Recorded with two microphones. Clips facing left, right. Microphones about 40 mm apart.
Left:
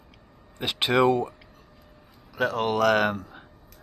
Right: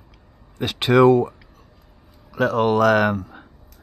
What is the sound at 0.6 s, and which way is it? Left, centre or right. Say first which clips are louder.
Speech: right 6 dB; centre.